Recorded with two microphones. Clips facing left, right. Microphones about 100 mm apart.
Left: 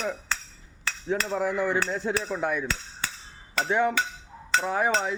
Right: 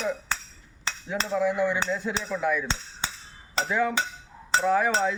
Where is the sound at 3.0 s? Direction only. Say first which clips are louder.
Right 1 dB; 25° right (ahead or behind).